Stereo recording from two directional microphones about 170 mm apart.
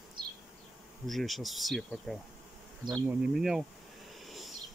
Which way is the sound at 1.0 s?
Centre (ahead or behind).